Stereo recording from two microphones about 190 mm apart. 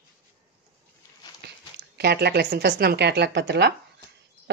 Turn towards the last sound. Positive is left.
turn(degrees=-65)  # may be behind; listen again after turning